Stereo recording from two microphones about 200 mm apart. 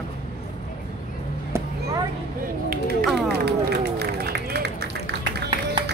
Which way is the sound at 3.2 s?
55° right (ahead or behind).